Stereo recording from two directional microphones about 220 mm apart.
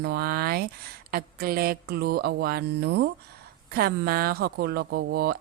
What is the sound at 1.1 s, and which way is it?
Speech, 45° right (ahead or behind).